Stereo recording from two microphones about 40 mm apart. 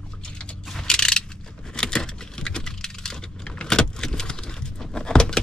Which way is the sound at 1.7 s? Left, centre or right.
Centre.